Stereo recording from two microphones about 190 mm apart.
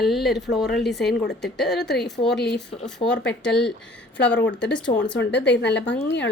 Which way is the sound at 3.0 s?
30° left (ahead or behind).